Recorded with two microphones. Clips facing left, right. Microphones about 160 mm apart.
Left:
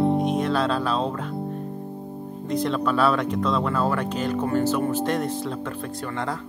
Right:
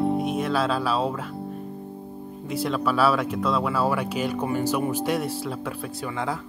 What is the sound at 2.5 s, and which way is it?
Speech, 5° right (ahead or behind).